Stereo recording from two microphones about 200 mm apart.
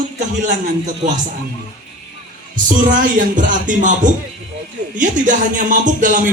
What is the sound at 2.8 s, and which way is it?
Speech, 40° right (ahead or behind).